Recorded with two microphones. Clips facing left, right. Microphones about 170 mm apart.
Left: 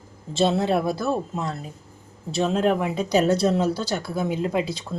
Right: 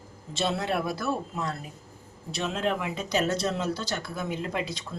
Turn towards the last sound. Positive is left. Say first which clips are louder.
# left 7 dB
turn(degrees=30)  # may be behind; listen again after turning